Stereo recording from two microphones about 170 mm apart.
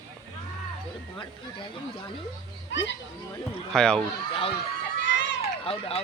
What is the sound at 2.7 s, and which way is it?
Speech, 90° left.